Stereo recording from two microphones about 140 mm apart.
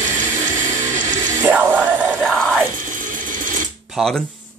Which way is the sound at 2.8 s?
70° right (ahead or behind).